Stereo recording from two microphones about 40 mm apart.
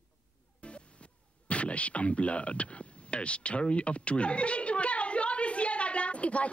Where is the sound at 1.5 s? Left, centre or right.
Left.